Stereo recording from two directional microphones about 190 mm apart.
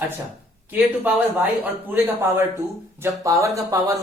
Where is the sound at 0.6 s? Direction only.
10° right (ahead or behind).